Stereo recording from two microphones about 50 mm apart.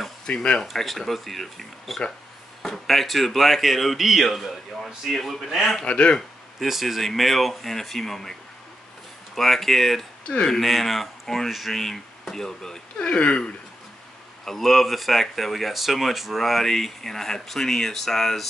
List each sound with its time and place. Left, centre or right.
0.3 s speech: centre
0.6 s speech: centre
5.9 s speech: left
6.6 s speech: centre
10.2 s speech: centre
10.5 s speech: centre
13.0 s speech: left
14.4 s speech: centre